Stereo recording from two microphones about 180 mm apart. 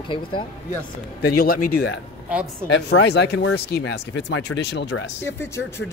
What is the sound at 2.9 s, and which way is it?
Speech, 70° left (ahead or behind).